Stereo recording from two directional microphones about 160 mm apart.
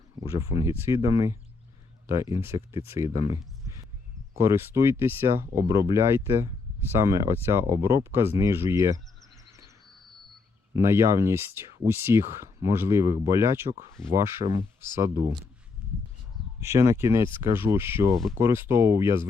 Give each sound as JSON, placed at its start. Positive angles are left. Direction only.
{"t": 0.2, "sound": "speech", "side_deg": -20}
{"t": 3.1, "sound": "a sound", "side_deg": -20}
{"t": 4.4, "sound": "speech", "side_deg": -15}
{"t": 10.8, "sound": "speech", "side_deg": -15}
{"t": 16.6, "sound": "speech", "side_deg": -15}